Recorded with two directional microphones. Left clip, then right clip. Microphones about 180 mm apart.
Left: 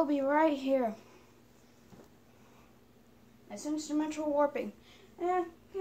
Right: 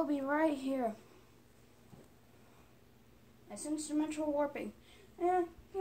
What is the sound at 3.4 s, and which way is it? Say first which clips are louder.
A woman's voice: left 3 dB; 15° left (ahead or behind).